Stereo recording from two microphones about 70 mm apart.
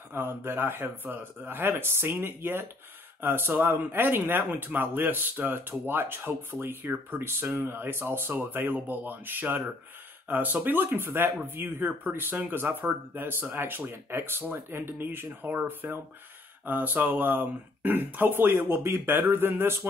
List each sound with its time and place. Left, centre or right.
0.1 s speech: right